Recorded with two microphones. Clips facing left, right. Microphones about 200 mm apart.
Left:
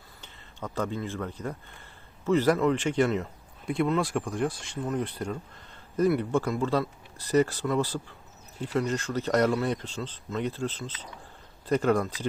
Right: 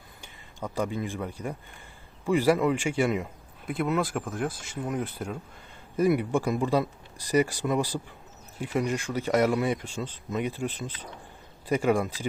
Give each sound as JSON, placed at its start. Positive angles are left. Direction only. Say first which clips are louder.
{"t": 0.2, "sound": "speech", "louder": "right 2 dB", "side_deg": -10}